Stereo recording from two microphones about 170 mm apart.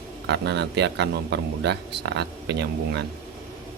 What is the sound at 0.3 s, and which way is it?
A man's voice, 80° right.